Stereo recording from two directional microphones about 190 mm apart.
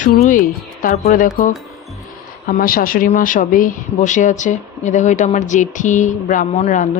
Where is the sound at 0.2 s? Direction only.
45° left (ahead or behind).